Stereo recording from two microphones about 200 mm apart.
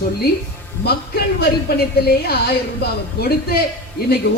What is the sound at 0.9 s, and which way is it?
Speech, 50° left (ahead or behind).